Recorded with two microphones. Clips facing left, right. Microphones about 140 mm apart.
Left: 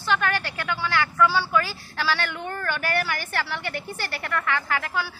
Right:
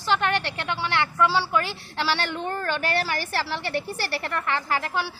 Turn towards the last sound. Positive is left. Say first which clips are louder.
# right 1 dB
turn(degrees=-30)  # may be behind; listen again after turning